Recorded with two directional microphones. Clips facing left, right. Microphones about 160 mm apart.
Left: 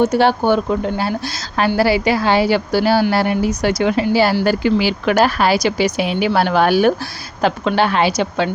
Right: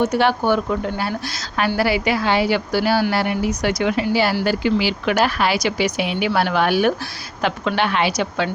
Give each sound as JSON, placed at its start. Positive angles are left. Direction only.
{"t": 0.0, "sound": "a woman's voice", "side_deg": 30}